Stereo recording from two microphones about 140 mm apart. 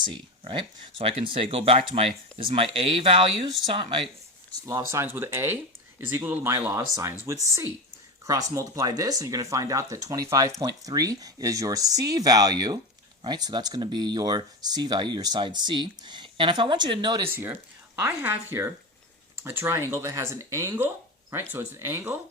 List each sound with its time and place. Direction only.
0.0 s speech: 35° right (ahead or behind)
4.6 s speech: 20° right (ahead or behind)
17.2 s speech: 15° right (ahead or behind)